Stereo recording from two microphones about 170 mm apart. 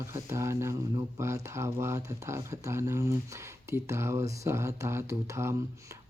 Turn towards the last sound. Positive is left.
turn(degrees=-15)  # may be behind; listen again after turning